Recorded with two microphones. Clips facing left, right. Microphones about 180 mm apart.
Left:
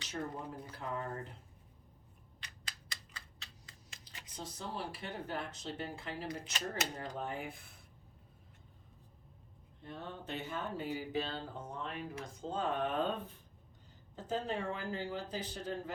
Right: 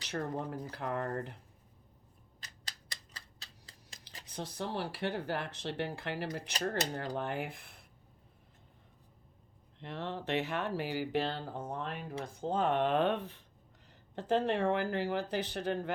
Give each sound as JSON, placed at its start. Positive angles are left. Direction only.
{"t": 0.1, "sound": "speech", "side_deg": -75}
{"t": 2.4, "sound": "a sound", "side_deg": -35}
{"t": 4.3, "sound": "speech", "side_deg": -70}
{"t": 9.8, "sound": "speech", "side_deg": -85}